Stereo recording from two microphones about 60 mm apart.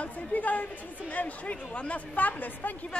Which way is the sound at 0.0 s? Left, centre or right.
Left.